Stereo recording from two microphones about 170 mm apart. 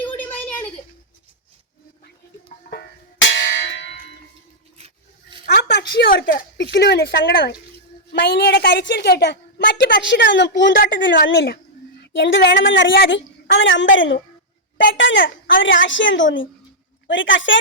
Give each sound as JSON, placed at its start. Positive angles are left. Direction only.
{"t": 0.0, "sound": "a sound", "side_deg": 10}
{"t": 2.6, "sound": "church bell", "side_deg": 80}
{"t": 5.6, "sound": "a sound", "side_deg": 90}
{"t": 6.1, "sound": "speech", "side_deg": 75}
{"t": 8.2, "sound": "a woman's voice", "side_deg": 90}
{"t": 10.8, "sound": "a woman's voice", "side_deg": 55}
{"t": 11.3, "sound": "a woman's voice", "side_deg": 90}